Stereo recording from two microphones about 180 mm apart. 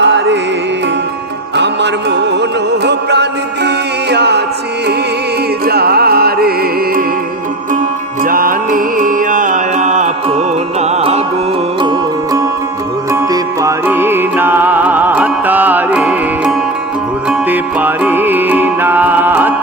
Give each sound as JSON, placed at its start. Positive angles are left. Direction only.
{"t": 0.0, "sound": "music", "side_deg": -80}
{"t": 1.5, "sound": "music", "side_deg": -75}
{"t": 4.1, "sound": "mantra", "side_deg": -70}
{"t": 5.6, "sound": "music", "side_deg": -60}
{"t": 8.2, "sound": "music", "side_deg": -50}
{"t": 11.8, "sound": "music", "side_deg": -25}